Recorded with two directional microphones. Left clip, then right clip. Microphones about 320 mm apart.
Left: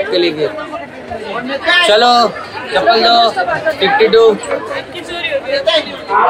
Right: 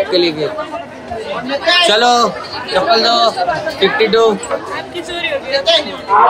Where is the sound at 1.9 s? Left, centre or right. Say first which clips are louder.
Left 2 dB; centre.